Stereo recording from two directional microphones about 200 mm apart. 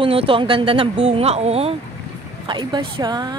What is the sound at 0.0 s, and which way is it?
Speech, 25° right (ahead or behind).